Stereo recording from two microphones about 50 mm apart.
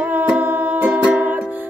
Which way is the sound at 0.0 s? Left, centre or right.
Right.